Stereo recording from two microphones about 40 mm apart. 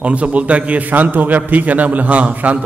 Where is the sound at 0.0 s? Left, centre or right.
Right.